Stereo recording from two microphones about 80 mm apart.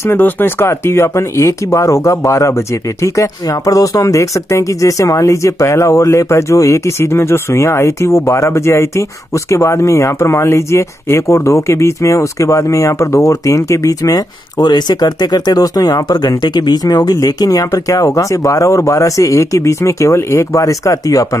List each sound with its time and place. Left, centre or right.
0.0 s speech: left